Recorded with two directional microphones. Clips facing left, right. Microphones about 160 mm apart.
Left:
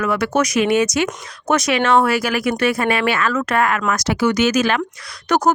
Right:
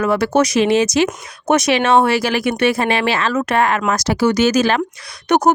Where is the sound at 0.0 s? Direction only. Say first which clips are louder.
Right 3 dB; 30° right (ahead or behind).